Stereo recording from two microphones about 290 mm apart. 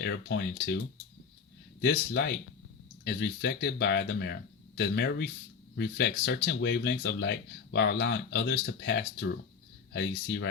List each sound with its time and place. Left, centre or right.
0.0 s speech: left
1.8 s speech: left